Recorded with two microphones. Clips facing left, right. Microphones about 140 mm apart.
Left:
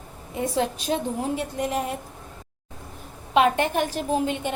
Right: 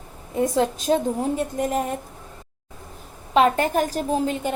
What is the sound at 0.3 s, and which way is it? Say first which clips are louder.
A woman's voice: right 4 dB; 45° right (ahead or behind).